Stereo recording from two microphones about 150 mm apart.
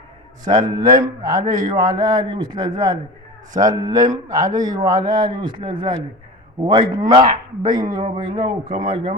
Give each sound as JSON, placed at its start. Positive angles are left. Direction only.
{"t": 0.4, "sound": "a man's voice", "side_deg": -25}